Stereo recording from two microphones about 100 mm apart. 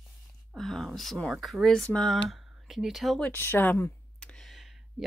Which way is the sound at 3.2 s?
20° left (ahead or behind).